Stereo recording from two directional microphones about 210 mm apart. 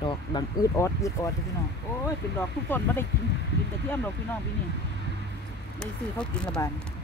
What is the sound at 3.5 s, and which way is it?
Speech, 55° left (ahead or behind).